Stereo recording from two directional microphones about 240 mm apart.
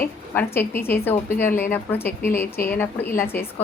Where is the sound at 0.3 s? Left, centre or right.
Centre.